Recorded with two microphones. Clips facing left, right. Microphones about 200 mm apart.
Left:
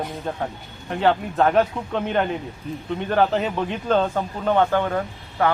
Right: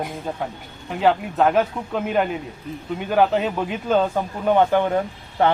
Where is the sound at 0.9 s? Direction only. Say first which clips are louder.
Right 1 dB; 5° right (ahead or behind).